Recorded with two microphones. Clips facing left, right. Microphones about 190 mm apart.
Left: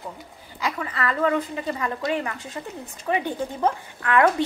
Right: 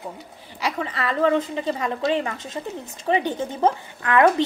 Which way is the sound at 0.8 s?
25° right (ahead or behind).